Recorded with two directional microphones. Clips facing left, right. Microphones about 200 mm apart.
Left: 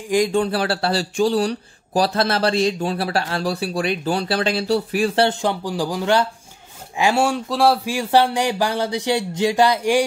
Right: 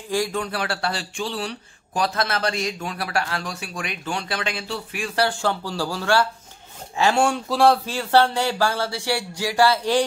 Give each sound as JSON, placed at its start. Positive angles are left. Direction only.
{"t": 0.3, "sound": "speech", "side_deg": 30}